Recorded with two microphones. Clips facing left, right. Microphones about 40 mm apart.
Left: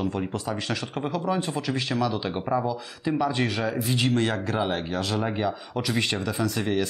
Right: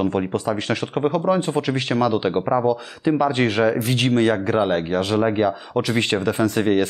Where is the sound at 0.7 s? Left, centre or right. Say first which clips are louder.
Right 9 dB; right.